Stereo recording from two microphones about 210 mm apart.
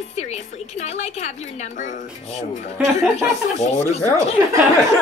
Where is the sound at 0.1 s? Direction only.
30° left (ahead or behind).